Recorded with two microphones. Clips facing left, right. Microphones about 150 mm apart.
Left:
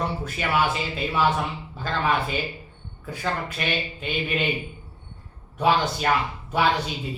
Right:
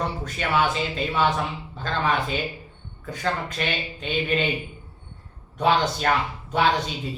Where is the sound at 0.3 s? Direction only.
5° left (ahead or behind).